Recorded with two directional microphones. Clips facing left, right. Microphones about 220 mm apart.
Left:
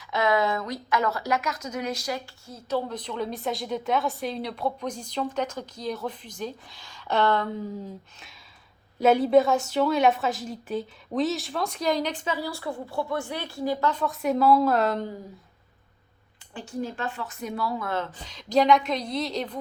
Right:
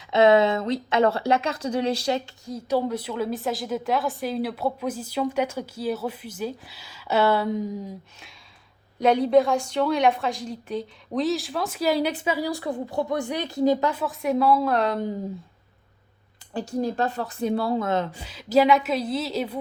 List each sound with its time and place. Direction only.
0.0 s speech: 25° right (ahead or behind)
2.5 s a woman's voice: 15° right (ahead or behind)
9.0 s a woman's voice: 5° left (ahead or behind); by 13.9 s 20° right (ahead or behind)
13.9 s a woman's voice: centre (ahead or behind)
16.6 s a woman's voice: 40° right (ahead or behind); by 19.5 s 5° right (ahead or behind)